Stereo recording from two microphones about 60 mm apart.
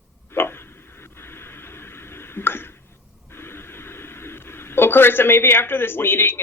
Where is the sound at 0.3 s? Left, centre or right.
Left.